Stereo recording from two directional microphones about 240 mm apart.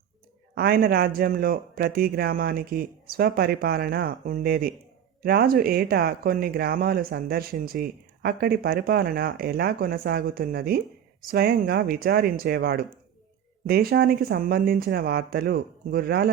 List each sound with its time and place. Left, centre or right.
0.5 s speech: right